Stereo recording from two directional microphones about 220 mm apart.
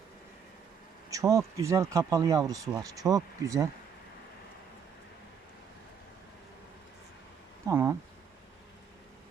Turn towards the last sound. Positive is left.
turn(degrees=-10)  # may be behind; listen again after turning